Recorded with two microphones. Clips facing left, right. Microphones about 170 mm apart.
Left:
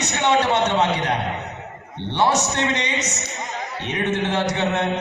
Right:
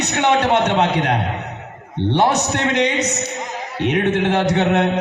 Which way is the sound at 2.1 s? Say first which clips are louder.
Right 1 dB; 55° right (ahead or behind).